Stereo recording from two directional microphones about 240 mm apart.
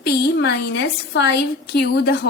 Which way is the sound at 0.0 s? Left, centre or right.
Left.